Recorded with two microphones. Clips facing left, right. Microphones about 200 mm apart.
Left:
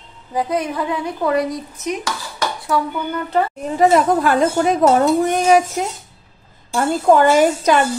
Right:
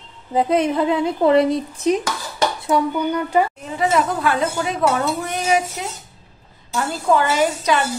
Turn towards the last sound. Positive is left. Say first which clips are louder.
# left 6 dB
turn(degrees=45)  # may be behind; listen again after turning